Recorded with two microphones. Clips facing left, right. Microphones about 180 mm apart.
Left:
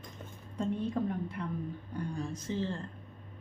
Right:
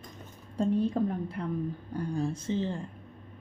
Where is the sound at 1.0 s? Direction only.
35° right (ahead or behind).